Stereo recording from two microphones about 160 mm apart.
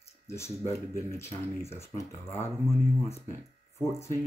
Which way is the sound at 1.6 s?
15° left (ahead or behind).